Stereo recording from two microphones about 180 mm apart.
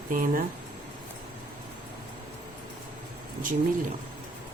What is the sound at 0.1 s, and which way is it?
Speech, 50° right (ahead or behind).